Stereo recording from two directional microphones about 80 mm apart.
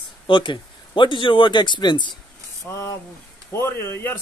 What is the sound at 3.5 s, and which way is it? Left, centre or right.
Speech, left.